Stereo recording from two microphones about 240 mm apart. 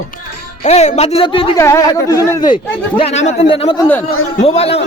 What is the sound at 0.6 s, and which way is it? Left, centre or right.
Speech, left.